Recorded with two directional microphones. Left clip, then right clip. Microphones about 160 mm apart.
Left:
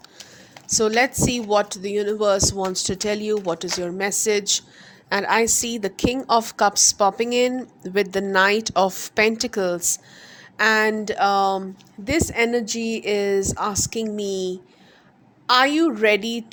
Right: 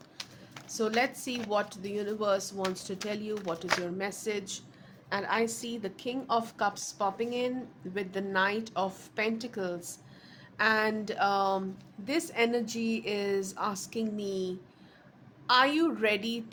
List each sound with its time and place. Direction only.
0.7 s a woman's voice: 45° left (ahead or behind)